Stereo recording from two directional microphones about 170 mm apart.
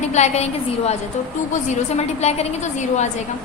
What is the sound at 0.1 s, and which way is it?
Speech, 40° left (ahead or behind).